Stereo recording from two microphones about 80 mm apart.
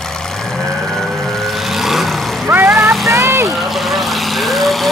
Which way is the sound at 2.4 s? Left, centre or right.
Right.